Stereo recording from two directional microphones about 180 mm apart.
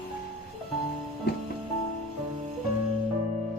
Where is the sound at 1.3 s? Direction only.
60° left (ahead or behind).